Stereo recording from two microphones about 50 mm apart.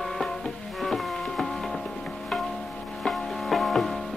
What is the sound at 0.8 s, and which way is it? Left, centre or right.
Music, centre.